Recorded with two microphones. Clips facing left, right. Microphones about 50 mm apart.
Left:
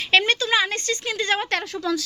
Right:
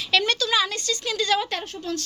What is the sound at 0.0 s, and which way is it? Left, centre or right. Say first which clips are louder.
A woman's voice: left 3 dB; left.